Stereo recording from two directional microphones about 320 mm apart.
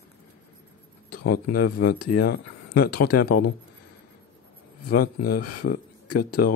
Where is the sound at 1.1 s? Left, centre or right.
Left.